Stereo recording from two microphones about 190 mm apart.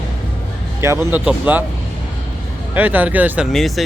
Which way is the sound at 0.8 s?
15° right (ahead or behind).